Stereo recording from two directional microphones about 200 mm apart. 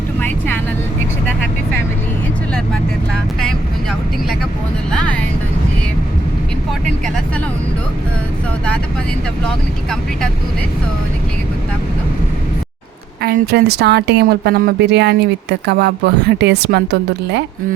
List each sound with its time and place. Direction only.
0.2 s speech: 10° left (ahead or behind)
13.2 s a woman's voice: 50° right (ahead or behind)